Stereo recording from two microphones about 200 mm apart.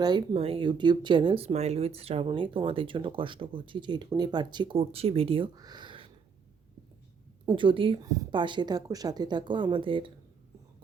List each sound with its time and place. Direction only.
0.0 s speech: 20° right (ahead or behind)
7.4 s speech: 25° right (ahead or behind)